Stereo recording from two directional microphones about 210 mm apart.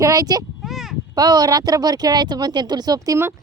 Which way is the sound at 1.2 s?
20° right (ahead or behind).